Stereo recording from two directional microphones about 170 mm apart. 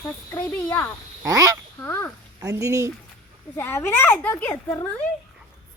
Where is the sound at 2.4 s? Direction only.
20° right (ahead or behind).